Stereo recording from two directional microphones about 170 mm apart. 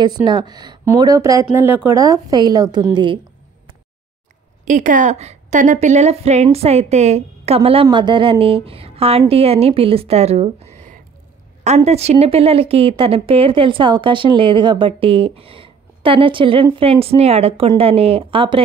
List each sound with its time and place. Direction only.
0.0 s speech: 25° right (ahead or behind)
4.6 s speech: 50° right (ahead or behind); by 18.6 s 30° right (ahead or behind)